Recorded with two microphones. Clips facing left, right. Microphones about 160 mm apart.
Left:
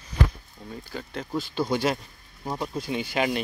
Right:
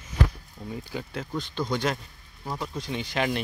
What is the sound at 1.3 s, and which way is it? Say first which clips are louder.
Speech: left 3 dB; 10° left (ahead or behind).